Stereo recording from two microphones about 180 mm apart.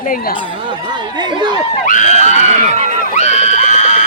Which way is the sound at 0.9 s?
25° right (ahead or behind).